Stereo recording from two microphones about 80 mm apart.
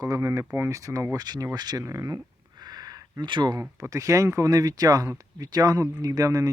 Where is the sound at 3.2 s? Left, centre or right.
Right.